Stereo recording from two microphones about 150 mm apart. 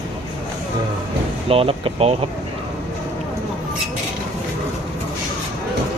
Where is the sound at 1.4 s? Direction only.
40° right (ahead or behind).